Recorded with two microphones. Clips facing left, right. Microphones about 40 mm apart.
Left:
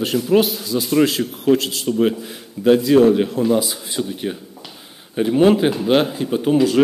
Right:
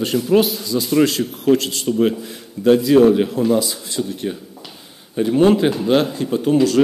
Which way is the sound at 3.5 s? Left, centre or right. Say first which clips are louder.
Even; centre.